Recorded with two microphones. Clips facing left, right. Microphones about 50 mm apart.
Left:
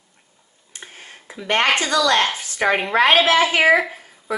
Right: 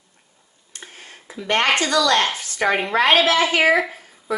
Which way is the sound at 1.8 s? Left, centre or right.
Centre.